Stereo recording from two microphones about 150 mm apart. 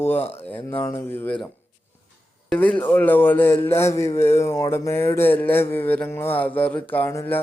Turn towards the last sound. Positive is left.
turn(degrees=15)  # may be behind; listen again after turning